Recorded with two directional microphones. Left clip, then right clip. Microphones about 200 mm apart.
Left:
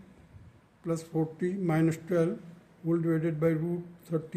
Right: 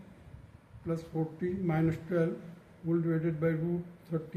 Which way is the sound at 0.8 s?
65° left (ahead or behind).